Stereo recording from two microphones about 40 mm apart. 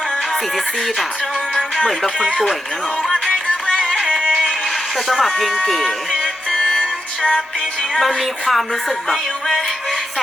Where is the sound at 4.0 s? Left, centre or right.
Centre.